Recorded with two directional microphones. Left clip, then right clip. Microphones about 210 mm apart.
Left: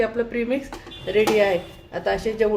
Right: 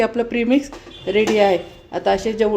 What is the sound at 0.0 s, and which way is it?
Speech, 40° right (ahead or behind).